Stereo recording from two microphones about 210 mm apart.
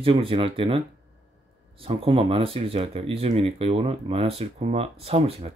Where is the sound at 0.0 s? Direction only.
25° right (ahead or behind).